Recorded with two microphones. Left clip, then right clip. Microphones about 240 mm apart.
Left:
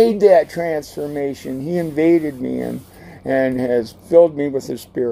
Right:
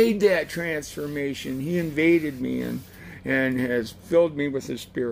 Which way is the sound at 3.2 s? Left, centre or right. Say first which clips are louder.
Left 6 dB; centre.